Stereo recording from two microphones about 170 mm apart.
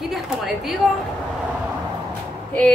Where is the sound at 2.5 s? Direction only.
10° left (ahead or behind).